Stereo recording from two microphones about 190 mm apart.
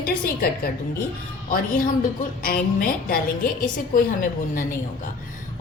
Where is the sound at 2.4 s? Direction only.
50° left (ahead or behind).